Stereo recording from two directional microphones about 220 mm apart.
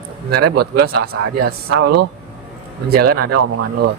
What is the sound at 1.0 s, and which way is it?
Speech, 90° right.